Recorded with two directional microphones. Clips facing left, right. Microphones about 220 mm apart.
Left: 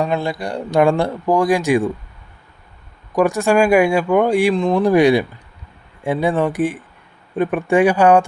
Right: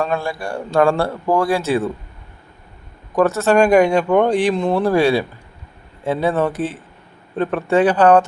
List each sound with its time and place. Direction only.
0.0 s speech: 20° left (ahead or behind)
3.2 s speech: 15° left (ahead or behind)
4.5 s speech: 5° right (ahead or behind)
4.8 s speech: 15° left (ahead or behind)